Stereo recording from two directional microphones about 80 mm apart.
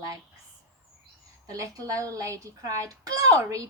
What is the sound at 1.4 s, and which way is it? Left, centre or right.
A woman's voice, right.